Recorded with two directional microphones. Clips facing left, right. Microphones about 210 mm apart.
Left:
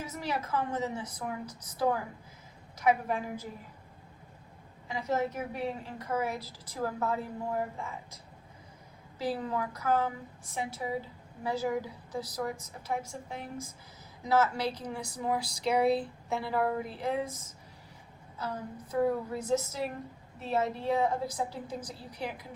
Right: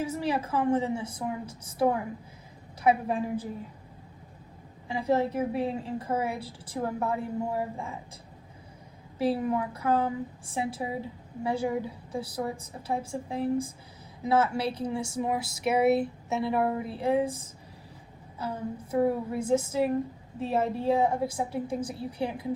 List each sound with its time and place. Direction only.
0.0 s a woman's voice: 30° right (ahead or behind)
4.9 s a woman's voice: 30° right (ahead or behind)
7.8 s a woman's voice: 30° right (ahead or behind)
9.2 s a woman's voice: 25° right (ahead or behind)